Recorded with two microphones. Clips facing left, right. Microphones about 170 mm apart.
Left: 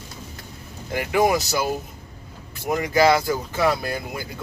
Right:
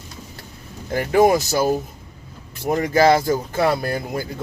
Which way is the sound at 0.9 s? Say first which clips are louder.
Right 4 dB; 40° right (ahead or behind).